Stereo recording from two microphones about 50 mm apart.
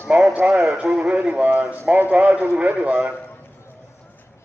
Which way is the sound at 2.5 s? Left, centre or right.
Right.